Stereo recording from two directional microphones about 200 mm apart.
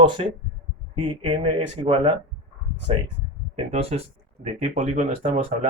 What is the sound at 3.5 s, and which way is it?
Speech, 30° right (ahead or behind).